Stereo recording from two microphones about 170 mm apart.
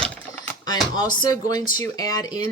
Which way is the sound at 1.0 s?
25° left (ahead or behind).